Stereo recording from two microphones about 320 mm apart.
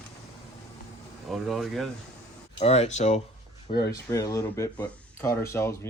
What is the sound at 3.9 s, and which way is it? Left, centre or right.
Speech, centre.